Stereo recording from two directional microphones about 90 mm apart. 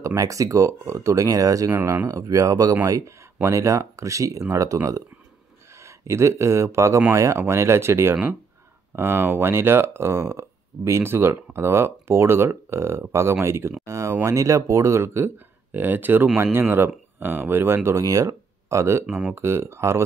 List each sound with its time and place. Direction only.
0.0 s speech: 40° right (ahead or behind)
1.8 s speech: 20° right (ahead or behind)
2.0 s speech: 40° right (ahead or behind)
5.8 s speech: 30° right (ahead or behind)
19.0 s speech: 10° right (ahead or behind)
19.3 s speech: 30° right (ahead or behind)